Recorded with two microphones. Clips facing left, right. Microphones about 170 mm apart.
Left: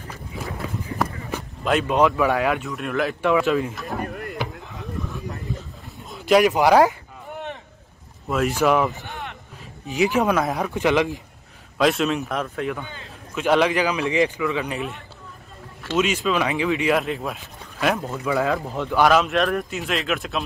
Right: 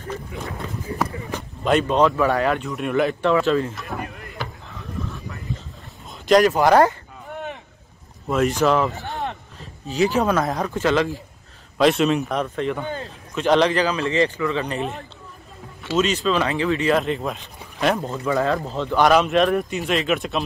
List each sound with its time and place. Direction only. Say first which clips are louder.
0.9 s speech: right 1 dB; centre (ahead or behind)
3.7 s speech: left 1 dB; centre (ahead or behind)
4.0 s chop: left 4 dB; 45° left (ahead or behind)
6.0 s speech: right 1 dB; 5° left (ahead or behind)
8.3 s speech: right 1 dB; centre (ahead or behind)
11.8 s a man's voice: right 3 dB; centre (ahead or behind)
12.8 s a man's voice: right 10 dB; 40° right (ahead or behind)
13.3 s speech: right 1 dB; 5° left (ahead or behind)
16.0 s a man's voice: right 1 dB; 10° left (ahead or behind)